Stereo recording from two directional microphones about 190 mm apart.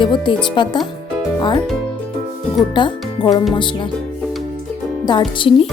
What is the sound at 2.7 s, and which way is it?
Speech, 25° left (ahead or behind).